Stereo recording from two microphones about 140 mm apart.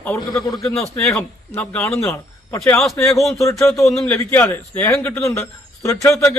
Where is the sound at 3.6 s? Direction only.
Centre (ahead or behind).